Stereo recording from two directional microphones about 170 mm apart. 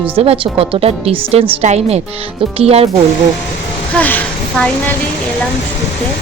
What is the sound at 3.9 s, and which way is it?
Speech, 10° left (ahead or behind).